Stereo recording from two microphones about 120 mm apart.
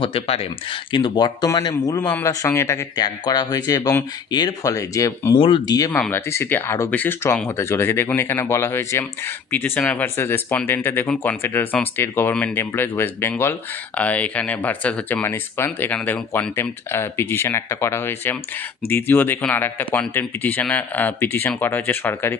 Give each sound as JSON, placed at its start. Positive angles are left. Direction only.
{"t": 0.0, "sound": "speech", "side_deg": 55}
{"t": 2.0, "sound": "speech", "side_deg": 15}
{"t": 2.2, "sound": "speech", "side_deg": 25}
{"t": 5.4, "sound": "speech", "side_deg": 45}
{"t": 5.9, "sound": "speech", "side_deg": 20}